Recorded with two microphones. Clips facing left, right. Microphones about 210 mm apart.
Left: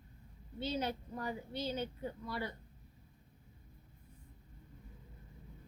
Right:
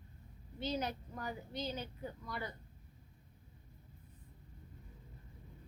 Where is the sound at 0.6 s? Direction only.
30° left (ahead or behind).